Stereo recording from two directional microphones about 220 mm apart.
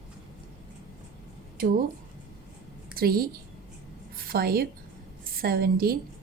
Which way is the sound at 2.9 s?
45° right (ahead or behind).